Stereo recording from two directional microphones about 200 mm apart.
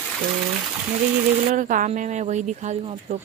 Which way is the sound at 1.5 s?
40° right (ahead or behind).